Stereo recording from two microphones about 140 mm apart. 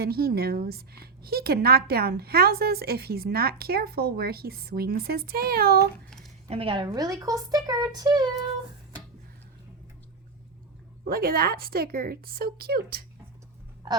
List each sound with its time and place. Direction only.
0.0 s a woman's voice: 90° right
6.5 s a woman's voice: 40° right (ahead or behind)
6.8 s speech: 30° right (ahead or behind)
11.0 s a woman's voice: 90° right